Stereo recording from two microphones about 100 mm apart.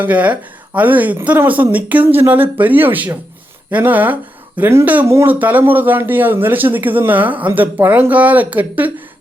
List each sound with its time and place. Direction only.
0.0 s speech: 15° right (ahead or behind)
5.3 s speech: 15° right (ahead or behind)